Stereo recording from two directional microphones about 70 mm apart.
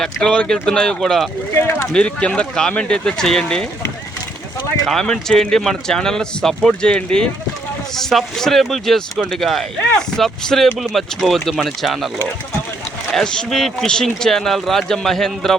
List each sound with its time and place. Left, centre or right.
0.0 s speech: centre
1.5 s speech: left
1.9 s speech: centre
4.9 s speech: centre
13.1 s speech: centre